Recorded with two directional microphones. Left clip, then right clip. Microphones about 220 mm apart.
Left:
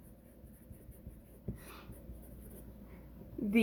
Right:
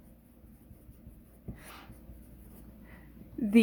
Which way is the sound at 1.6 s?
50° right (ahead or behind).